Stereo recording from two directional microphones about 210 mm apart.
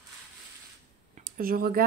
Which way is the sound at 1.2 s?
45° right (ahead or behind).